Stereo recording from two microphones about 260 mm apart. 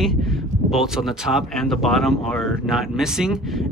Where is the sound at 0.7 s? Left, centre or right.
Centre.